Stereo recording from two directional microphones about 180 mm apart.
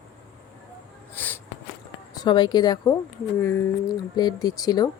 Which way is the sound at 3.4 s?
15° left (ahead or behind).